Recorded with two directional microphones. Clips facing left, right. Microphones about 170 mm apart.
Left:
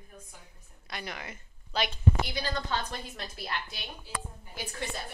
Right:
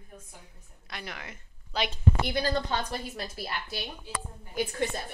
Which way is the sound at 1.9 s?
45° right (ahead or behind).